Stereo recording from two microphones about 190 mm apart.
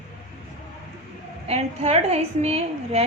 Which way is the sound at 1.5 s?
35° right (ahead or behind).